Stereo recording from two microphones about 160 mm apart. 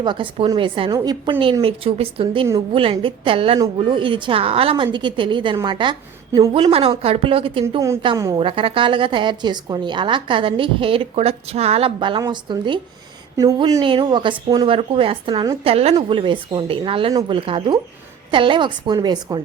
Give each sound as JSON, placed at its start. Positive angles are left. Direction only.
{"t": 0.0, "sound": "a woman's voice", "side_deg": -30}
{"t": 8.0, "sound": "a woman's voice", "side_deg": -25}
{"t": 8.4, "sound": "a woman's voice", "side_deg": -35}